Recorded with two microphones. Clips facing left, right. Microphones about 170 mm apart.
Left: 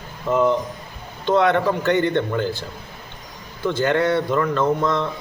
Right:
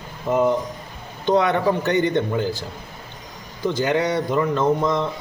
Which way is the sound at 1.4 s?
60° left (ahead or behind).